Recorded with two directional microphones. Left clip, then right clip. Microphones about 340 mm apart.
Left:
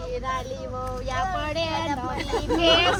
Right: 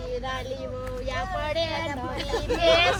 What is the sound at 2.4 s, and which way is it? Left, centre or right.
Speech, centre.